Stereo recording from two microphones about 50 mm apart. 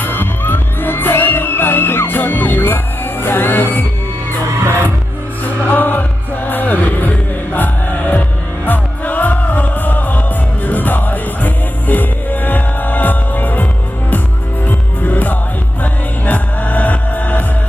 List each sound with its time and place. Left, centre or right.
0.0 s music: left
5.6 s music: left
14.7 s music: left